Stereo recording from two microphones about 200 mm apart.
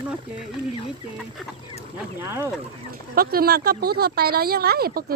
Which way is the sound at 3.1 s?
50° right (ahead or behind).